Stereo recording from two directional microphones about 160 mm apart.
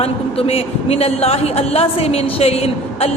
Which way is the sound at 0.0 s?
40° left (ahead or behind).